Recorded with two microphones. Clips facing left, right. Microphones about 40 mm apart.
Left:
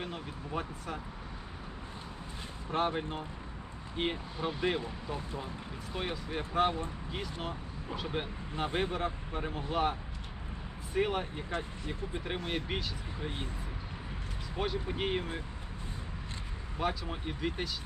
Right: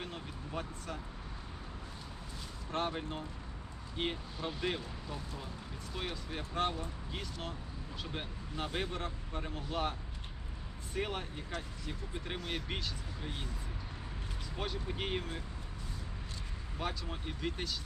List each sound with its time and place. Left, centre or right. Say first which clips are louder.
0.0 s a sound: left 4 dB; centre
2.6 s speech: left 5 dB; centre
8.1 s speech: left 5 dB; centre
14.5 s speech: left 5 dB; centre
16.7 s speech: left 5 dB; centre